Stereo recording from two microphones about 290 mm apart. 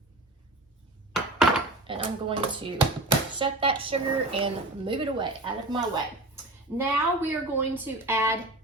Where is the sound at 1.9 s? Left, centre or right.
Centre.